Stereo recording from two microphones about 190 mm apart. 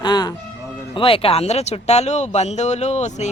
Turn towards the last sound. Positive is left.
turn(degrees=35)  # may be behind; listen again after turning